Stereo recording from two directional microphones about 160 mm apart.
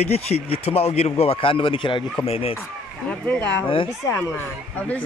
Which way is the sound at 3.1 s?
5° left (ahead or behind).